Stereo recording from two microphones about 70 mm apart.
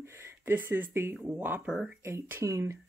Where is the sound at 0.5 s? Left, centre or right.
Right.